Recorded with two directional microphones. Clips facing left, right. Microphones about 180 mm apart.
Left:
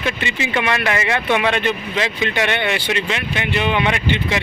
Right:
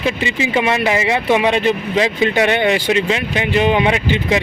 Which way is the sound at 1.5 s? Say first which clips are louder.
Right 5 dB; 35° right (ahead or behind).